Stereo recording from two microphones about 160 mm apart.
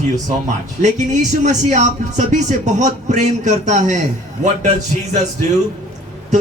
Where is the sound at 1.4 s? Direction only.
45° right (ahead or behind).